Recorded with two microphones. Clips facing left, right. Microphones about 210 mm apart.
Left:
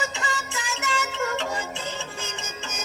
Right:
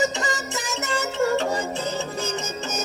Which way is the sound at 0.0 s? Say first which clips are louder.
Right 6 dB; 40° right (ahead or behind).